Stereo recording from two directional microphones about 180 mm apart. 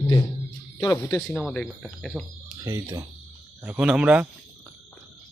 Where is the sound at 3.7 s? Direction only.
5° right (ahead or behind).